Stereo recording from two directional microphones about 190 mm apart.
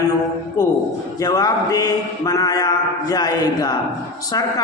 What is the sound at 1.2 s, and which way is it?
A man's voice, 20° left (ahead or behind).